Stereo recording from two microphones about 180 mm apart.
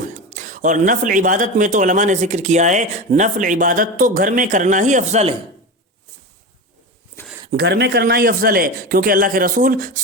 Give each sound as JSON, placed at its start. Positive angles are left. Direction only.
{"t": 0.0, "sound": "speech", "side_deg": -45}
{"t": 7.5, "sound": "speech", "side_deg": -65}